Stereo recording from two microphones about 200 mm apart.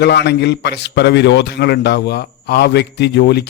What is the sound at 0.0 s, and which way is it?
A man's voice, 55° left (ahead or behind).